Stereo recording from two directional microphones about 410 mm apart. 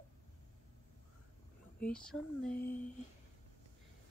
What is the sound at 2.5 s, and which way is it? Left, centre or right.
Speech, left.